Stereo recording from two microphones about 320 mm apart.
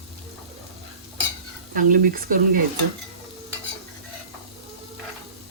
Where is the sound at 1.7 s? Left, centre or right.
Right.